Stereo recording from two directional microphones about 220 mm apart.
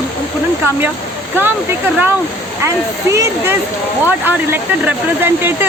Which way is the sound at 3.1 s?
10° right (ahead or behind).